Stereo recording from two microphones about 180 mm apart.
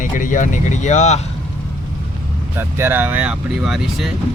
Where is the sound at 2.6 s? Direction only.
10° right (ahead or behind).